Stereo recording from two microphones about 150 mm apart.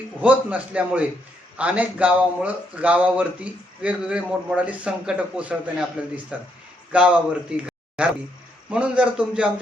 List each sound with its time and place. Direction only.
0.2 s a man's voice: 10° right (ahead or behind)